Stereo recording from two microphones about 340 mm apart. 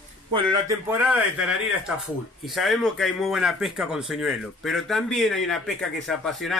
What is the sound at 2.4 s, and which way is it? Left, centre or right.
Speech, centre.